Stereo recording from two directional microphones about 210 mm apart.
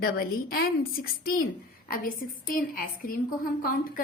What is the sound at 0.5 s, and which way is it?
A woman's voice, 45° left (ahead or behind).